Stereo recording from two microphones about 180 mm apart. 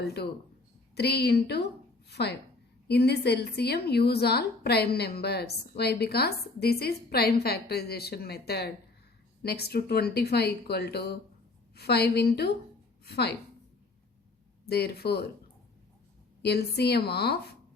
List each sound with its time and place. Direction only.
0.9 s a woman's voice: 65° left (ahead or behind)
14.7 s speech: 60° left (ahead or behind)
16.4 s speech: 65° left (ahead or behind)